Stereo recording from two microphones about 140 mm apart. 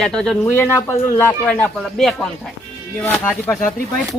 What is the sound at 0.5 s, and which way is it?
A man's voice, 15° left (ahead or behind).